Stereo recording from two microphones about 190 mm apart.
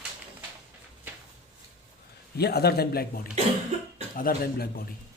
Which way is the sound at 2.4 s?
55° left (ahead or behind).